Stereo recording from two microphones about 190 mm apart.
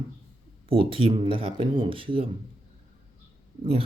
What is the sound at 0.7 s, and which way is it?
Speech, 30° right (ahead or behind).